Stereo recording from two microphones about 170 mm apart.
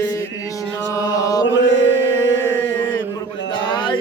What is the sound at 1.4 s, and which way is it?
Chant, 90° left.